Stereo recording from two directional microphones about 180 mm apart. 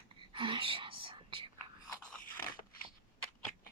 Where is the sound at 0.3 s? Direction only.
30° right (ahead or behind).